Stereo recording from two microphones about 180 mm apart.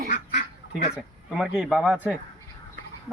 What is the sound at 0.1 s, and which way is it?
Duck, 45° left (ahead or behind).